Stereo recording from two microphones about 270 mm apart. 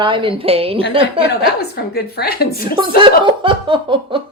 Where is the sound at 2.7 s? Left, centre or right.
Centre.